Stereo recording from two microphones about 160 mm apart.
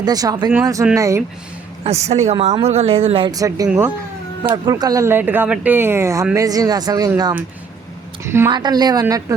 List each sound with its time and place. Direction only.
0.0 s speech: 25° right (ahead or behind)
1.8 s a woman's voice: 40° right (ahead or behind)
3.3 s speech: 20° right (ahead or behind)
4.5 s speech: 25° right (ahead or behind)
8.2 s speech: 15° right (ahead or behind)
8.4 s speech: 25° right (ahead or behind)